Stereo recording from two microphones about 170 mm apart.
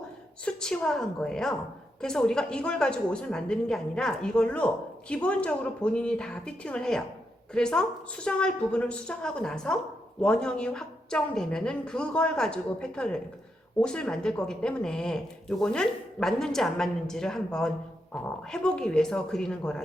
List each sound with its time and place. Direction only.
0.4 s a woman's voice: 5° left (ahead or behind)